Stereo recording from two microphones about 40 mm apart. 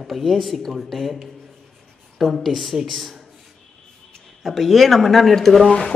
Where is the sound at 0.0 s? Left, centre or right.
Centre.